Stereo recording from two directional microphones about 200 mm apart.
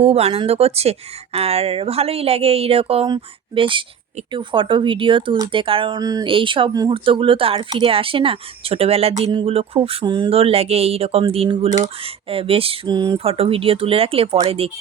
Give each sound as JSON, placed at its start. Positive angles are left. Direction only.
{"t": 0.0, "sound": "speech", "side_deg": -30}